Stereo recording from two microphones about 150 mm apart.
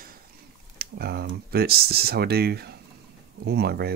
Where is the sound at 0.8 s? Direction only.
90° right.